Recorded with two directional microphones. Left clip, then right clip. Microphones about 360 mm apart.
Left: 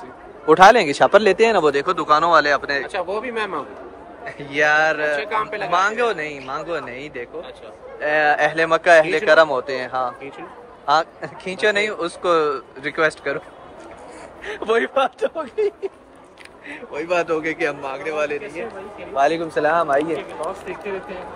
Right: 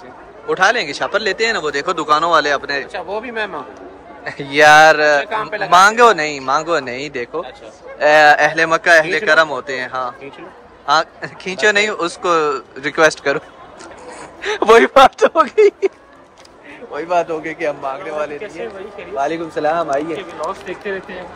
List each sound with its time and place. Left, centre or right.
0.5 s speech: centre
1.7 s speech: centre
14.4 s speech: centre
16.9 s speech: centre